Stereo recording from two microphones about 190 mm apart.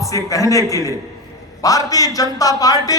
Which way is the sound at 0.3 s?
15° left (ahead or behind).